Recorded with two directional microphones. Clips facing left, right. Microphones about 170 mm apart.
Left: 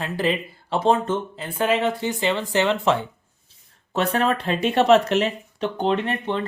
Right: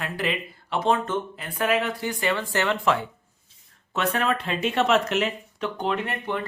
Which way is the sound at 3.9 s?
35° left (ahead or behind).